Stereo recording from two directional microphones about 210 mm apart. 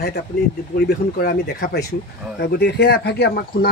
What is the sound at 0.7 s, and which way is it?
Speech, 45° left (ahead or behind).